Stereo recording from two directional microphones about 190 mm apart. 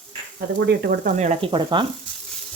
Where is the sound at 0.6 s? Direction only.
55° right (ahead or behind); by 1.8 s 25° right (ahead or behind).